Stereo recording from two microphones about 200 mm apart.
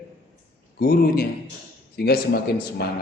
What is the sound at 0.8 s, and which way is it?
Speech, 50° left (ahead or behind).